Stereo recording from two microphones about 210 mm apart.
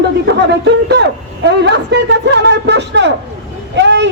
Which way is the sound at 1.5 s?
55° right (ahead or behind).